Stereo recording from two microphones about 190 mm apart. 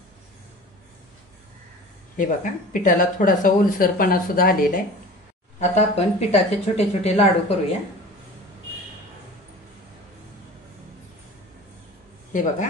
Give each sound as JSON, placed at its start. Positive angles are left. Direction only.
{"t": 2.1, "sound": "speech", "side_deg": 45}
{"t": 5.6, "sound": "speech", "side_deg": 35}